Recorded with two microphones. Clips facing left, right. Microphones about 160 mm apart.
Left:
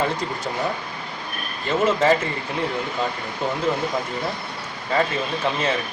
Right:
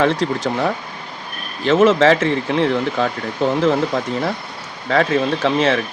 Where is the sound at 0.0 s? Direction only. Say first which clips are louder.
Right 7 dB; 90° right.